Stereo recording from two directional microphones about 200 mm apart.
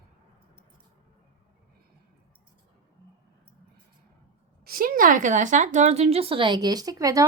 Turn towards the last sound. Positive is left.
turn(degrees=-15)  # may be behind; listen again after turning